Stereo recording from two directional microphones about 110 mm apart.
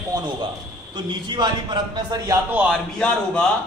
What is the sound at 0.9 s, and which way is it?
A man's voice, 45° right (ahead or behind).